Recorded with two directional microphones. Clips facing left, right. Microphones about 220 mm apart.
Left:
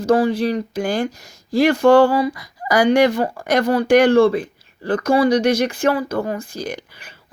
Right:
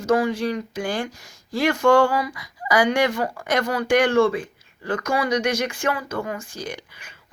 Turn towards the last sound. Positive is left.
turn(degrees=35)  # may be behind; listen again after turning